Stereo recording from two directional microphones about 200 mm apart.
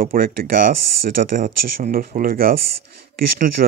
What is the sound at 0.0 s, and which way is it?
Speech, 45° right (ahead or behind).